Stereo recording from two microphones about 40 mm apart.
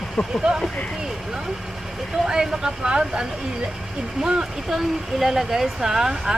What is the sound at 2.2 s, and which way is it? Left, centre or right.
Speech, centre.